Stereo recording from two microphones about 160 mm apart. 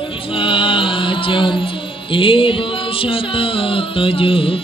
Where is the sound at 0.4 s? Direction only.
30° left (ahead or behind).